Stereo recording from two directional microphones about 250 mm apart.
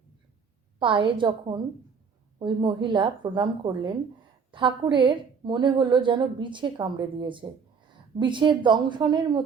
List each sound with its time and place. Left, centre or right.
0.8 s a woman's voice: centre